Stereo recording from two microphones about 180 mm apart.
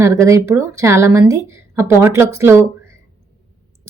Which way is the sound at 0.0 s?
15° right (ahead or behind).